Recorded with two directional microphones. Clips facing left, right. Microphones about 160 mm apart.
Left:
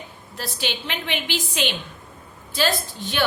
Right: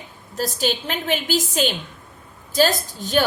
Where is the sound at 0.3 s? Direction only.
40° right (ahead or behind).